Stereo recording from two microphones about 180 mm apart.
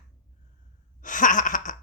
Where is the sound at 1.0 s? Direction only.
45° left (ahead or behind).